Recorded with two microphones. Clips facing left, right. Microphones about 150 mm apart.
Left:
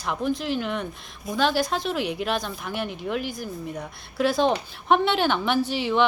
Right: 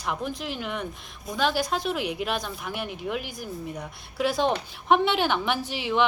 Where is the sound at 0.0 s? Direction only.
10° right (ahead or behind).